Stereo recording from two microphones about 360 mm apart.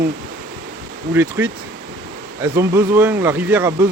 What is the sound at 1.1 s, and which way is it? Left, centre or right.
Speech, centre.